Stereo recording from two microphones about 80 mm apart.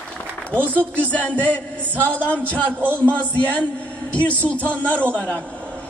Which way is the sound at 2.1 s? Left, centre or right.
Centre.